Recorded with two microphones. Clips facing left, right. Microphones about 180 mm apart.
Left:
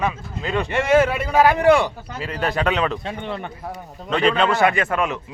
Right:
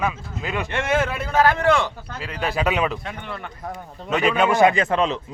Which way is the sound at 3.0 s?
20° left (ahead or behind).